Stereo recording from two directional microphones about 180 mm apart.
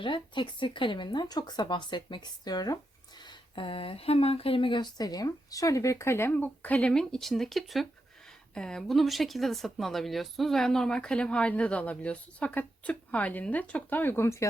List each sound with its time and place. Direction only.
0.0 s speech: 25° left (ahead or behind)